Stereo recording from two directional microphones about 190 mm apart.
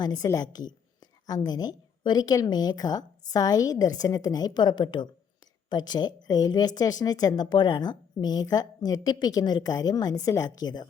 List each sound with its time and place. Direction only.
0.0 s speech: 20° left (ahead or behind)